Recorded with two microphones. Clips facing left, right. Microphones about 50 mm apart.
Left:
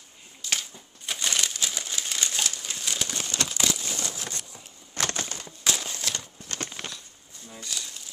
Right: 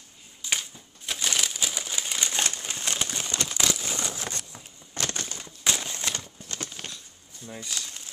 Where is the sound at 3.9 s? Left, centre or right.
Right.